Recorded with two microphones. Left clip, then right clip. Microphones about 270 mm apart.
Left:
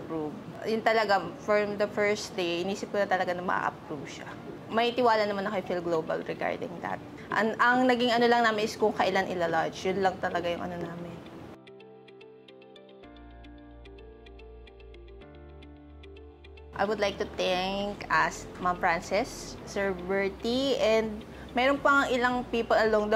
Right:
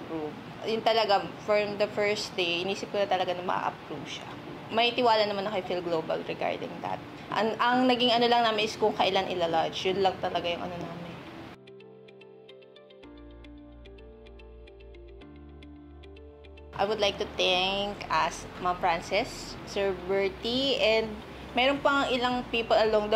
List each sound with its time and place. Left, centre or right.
0.7 s speech: left
16.7 s speech: left